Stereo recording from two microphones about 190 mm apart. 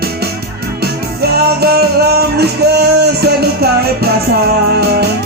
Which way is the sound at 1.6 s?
55° right (ahead or behind).